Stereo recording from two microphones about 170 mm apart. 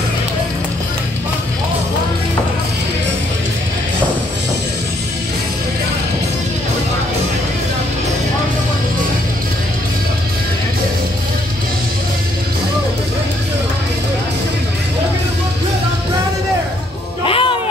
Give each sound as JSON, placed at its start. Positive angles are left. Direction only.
{"t": 17.2, "sound": "music", "side_deg": 30}